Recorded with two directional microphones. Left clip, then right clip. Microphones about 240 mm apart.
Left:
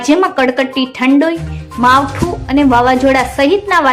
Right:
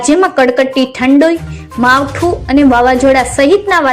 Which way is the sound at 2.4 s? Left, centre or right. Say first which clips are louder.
Right 1 dB; centre.